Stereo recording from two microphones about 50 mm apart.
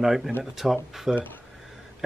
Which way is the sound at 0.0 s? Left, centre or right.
Centre.